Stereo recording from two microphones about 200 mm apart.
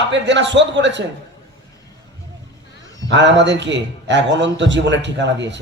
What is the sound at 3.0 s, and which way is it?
A man's voice, 60° right (ahead or behind).